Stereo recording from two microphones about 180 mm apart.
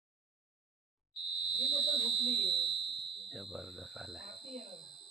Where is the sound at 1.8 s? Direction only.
35° right (ahead or behind).